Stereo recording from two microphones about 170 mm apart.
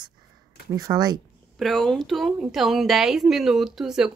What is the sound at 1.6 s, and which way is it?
A woman's voice, centre (ahead or behind).